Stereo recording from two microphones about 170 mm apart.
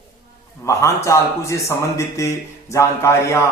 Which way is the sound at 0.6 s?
20° left (ahead or behind).